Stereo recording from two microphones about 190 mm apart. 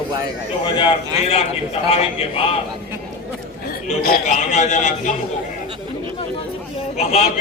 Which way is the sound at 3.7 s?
50° left (ahead or behind).